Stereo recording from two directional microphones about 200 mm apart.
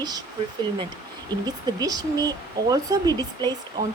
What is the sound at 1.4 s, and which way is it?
A woman's voice, 20° right (ahead or behind).